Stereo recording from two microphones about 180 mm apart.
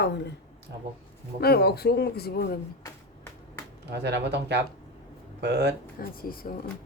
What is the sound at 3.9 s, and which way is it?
Speech, 70° right (ahead or behind).